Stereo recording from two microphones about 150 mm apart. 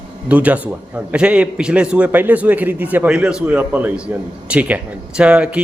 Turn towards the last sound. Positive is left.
turn(degrees=-5)  # may be behind; listen again after turning